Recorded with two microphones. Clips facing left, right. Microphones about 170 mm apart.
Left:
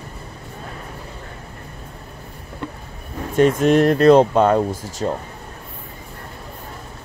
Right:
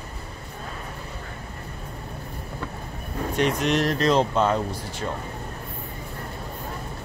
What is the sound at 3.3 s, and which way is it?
Speech, 45° left (ahead or behind).